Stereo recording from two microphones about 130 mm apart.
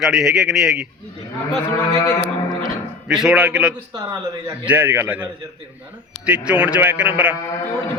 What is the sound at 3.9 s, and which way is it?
Speech, 35° right (ahead or behind).